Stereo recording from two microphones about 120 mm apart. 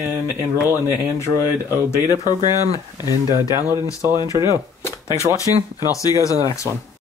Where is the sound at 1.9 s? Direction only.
30° left (ahead or behind).